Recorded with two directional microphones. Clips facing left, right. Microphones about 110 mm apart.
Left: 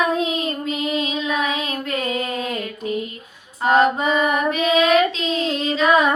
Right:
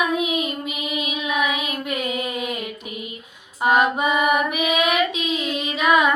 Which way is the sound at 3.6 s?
15° right (ahead or behind).